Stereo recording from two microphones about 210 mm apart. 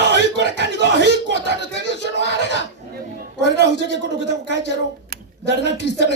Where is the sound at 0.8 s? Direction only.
55° left (ahead or behind).